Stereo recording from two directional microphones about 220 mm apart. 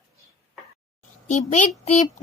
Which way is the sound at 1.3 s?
35° left (ahead or behind).